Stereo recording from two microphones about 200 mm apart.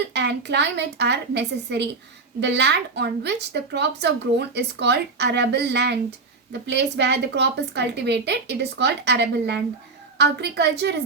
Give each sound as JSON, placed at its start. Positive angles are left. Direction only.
{"t": 0.1, "sound": "a woman's voice", "side_deg": -60}